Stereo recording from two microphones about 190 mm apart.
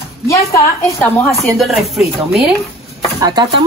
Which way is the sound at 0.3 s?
15° left (ahead or behind).